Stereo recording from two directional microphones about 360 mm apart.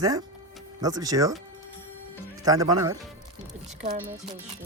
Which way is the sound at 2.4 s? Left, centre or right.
Centre.